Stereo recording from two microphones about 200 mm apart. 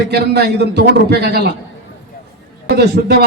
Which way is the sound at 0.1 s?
55° right (ahead or behind).